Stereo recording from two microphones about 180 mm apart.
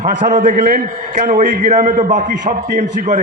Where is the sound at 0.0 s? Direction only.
45° right (ahead or behind).